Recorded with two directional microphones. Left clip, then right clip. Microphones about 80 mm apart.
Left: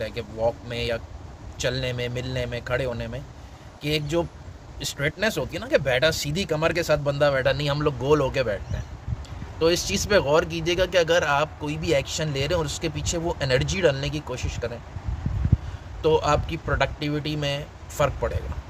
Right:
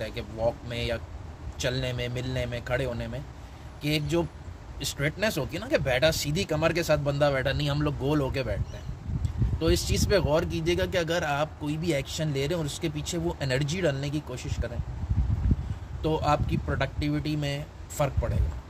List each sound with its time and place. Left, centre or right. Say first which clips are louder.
0.0 s speech: left 3 dB; left
9.6 s speech: left 5 dB; left
16.0 s speech: left 5 dB; left